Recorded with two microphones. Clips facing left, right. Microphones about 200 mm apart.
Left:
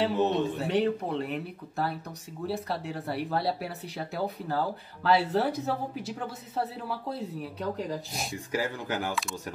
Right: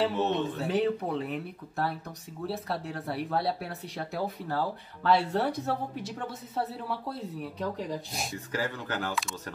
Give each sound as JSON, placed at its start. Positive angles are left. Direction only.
{"t": 0.1, "sound": "speech", "side_deg": 15}
{"t": 0.6, "sound": "speech", "side_deg": 0}
{"t": 8.5, "sound": "speech", "side_deg": 15}